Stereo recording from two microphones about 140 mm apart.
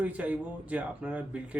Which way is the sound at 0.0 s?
10° right (ahead or behind).